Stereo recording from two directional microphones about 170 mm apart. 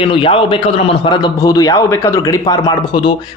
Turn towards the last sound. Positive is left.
turn(degrees=25)  # may be behind; listen again after turning